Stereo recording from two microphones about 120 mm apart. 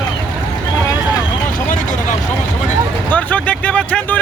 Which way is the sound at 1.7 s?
90° left.